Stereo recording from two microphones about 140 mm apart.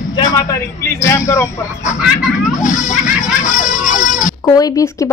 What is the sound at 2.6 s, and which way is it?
Music, 65° left (ahead or behind).